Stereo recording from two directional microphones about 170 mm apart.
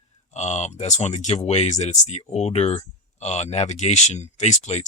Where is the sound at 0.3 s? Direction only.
40° left (ahead or behind).